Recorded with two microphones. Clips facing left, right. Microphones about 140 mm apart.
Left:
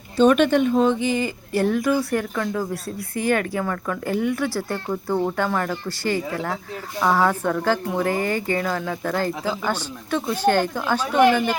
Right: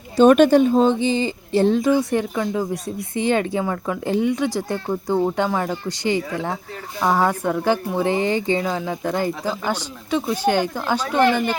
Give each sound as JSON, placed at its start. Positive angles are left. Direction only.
{"t": 0.2, "sound": "speech", "side_deg": -45}
{"t": 11.2, "sound": "a woman's voice", "side_deg": 10}